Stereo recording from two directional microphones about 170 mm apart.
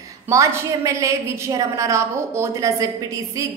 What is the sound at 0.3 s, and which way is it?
A woman's voice, 20° right (ahead or behind).